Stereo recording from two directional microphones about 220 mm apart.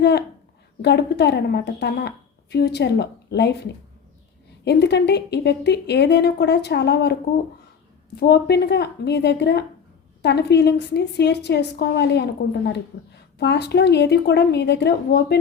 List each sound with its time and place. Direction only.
0.0 s a woman's voice: 50° left (ahead or behind)